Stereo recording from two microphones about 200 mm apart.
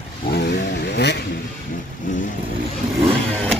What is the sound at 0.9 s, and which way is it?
Vehicle, 60° left (ahead or behind).